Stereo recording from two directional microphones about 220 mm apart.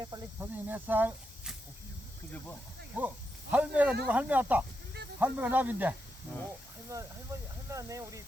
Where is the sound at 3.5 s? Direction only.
5° right (ahead or behind).